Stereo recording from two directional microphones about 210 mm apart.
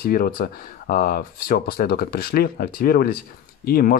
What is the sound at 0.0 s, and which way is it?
Speech, 45° left (ahead or behind).